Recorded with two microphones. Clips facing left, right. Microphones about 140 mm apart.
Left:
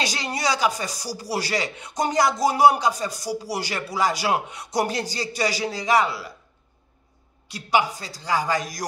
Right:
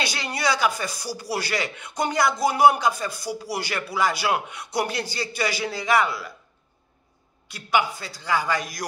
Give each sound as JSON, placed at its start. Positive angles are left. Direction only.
{"t": 0.0, "sound": "speech", "side_deg": 35}
{"t": 7.5, "sound": "speech", "side_deg": 35}